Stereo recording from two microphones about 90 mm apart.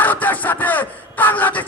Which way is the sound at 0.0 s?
20° left (ahead or behind).